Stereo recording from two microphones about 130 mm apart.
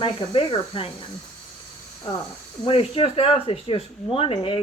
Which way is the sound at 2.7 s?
45° left (ahead or behind).